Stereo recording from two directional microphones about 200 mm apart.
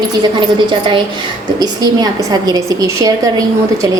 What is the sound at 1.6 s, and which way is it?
A woman's voice, 20° right (ahead or behind).